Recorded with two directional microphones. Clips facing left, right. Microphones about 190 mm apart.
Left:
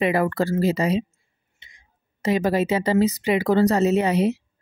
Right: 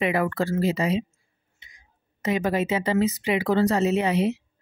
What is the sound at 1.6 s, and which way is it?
A woman's voice, 30° left (ahead or behind).